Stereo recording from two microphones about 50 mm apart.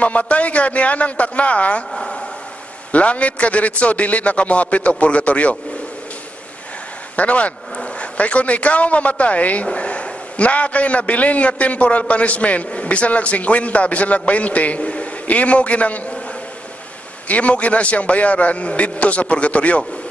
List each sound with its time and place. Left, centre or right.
0.0 s speech: left
2.0 s a sound: centre
2.9 s speech: left
7.2 s speech: left
17.3 s speech: left